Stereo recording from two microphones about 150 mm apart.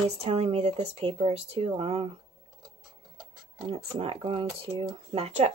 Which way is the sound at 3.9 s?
40° right (ahead or behind).